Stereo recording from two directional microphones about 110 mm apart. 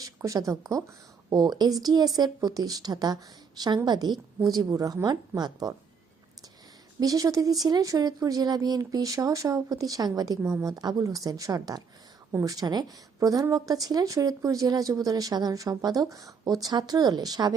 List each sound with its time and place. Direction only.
0.0 s speech: 30° right (ahead or behind)
7.0 s speech: 35° right (ahead or behind)
12.3 s speech: 25° right (ahead or behind)
12.5 s speech: 35° right (ahead or behind)